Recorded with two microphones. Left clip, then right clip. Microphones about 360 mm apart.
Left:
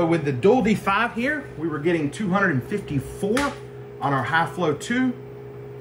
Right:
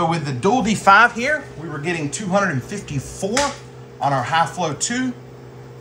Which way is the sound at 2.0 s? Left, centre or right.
Centre.